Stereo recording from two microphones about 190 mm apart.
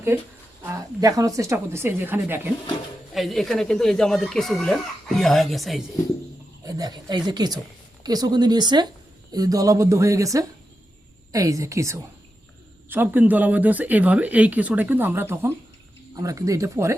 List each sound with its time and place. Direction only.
0.1 s speech: 15° right (ahead or behind)
3.2 s speech: centre (ahead or behind)
6.7 s speech: 20° right (ahead or behind)